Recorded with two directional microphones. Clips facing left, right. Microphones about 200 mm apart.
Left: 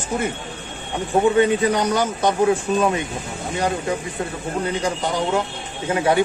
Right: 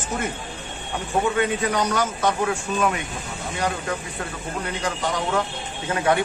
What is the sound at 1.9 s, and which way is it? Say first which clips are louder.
Speech: left 3 dB; 30° left (ahead or behind).